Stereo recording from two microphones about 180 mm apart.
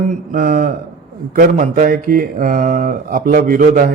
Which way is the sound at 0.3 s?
50° right (ahead or behind).